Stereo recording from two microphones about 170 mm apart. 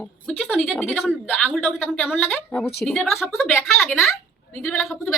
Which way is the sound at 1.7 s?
10° left (ahead or behind).